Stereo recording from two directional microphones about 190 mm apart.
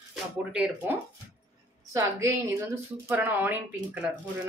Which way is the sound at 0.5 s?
10° right (ahead or behind).